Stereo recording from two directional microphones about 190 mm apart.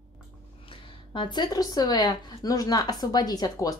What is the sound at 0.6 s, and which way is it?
Speech, 25° left (ahead or behind).